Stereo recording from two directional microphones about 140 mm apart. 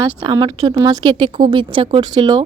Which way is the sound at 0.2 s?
30° right (ahead or behind).